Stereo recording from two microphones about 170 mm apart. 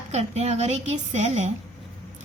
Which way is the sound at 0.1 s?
40° right (ahead or behind).